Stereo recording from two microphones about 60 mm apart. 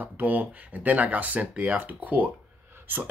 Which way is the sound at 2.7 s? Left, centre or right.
Right.